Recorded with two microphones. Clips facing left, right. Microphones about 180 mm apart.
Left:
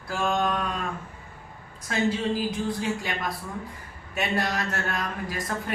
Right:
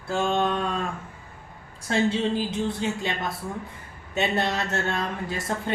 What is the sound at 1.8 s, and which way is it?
Speech, 25° right (ahead or behind).